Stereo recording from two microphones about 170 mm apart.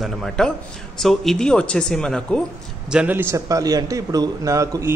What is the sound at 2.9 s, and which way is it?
A man's voice, 10° right (ahead or behind).